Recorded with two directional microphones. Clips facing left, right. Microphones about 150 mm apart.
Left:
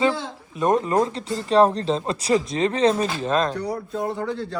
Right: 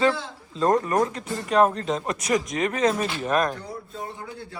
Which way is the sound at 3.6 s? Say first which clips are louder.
Left 9 dB; 85° left.